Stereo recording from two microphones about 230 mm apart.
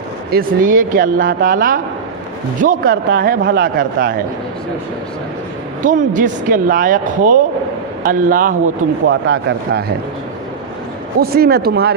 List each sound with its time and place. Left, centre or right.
0.3 s speech: right
5.8 s speech: right
9.0 s speech: right
11.2 s speech: right